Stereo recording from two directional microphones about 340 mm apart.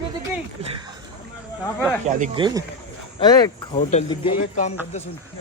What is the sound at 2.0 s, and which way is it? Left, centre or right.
Speech, right.